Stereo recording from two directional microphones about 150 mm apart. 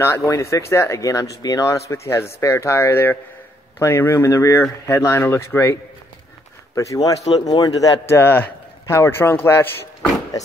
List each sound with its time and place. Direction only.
0.0 s a man's voice: 20° left (ahead or behind)